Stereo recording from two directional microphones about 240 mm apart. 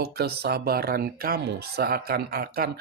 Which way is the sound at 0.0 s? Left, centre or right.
Right.